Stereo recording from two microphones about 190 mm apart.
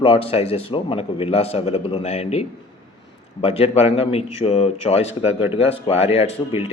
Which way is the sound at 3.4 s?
35° left (ahead or behind).